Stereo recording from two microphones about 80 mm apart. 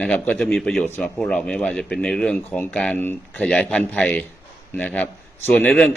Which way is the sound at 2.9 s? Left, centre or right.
Left.